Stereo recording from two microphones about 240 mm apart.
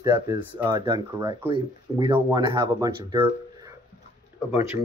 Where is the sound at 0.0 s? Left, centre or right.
Centre.